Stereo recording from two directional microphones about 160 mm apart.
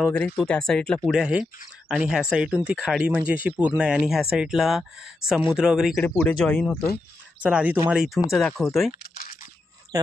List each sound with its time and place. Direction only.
0.0 s speech: 5° left (ahead or behind)
5.9 s speech: 10° left (ahead or behind)
7.4 s speech: 10° right (ahead or behind)
9.0 s a sound: 75° left (ahead or behind)